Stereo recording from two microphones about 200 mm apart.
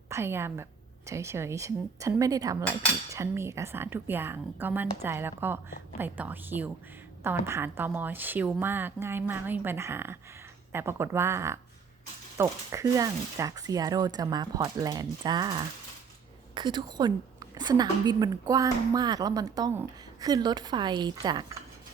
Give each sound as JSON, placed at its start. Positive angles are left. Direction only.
{"t": 0.1, "sound": "a woman's voice", "side_deg": -10}